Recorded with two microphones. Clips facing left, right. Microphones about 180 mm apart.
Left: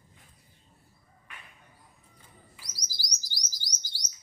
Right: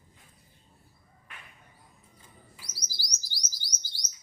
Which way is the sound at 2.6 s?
15° left (ahead or behind).